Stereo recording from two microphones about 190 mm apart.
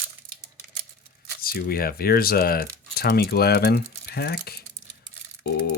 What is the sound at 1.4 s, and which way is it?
Speech, 50° left (ahead or behind).